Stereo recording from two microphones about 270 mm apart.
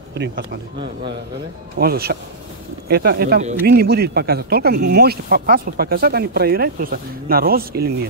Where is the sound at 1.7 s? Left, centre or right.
Right.